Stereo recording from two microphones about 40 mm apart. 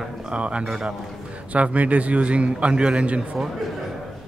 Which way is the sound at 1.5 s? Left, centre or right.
Right.